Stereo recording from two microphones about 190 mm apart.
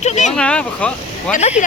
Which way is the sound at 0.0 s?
35° left (ahead or behind).